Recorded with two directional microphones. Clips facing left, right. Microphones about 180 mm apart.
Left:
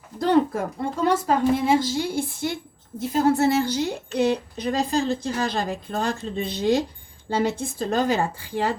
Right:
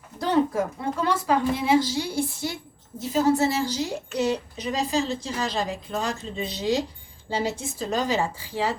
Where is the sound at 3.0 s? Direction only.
55° left (ahead or behind).